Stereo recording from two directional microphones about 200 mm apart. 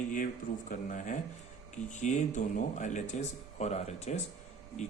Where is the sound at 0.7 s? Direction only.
40° left (ahead or behind).